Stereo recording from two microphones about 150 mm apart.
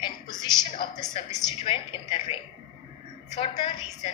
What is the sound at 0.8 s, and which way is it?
A woman's voice, 30° left (ahead or behind).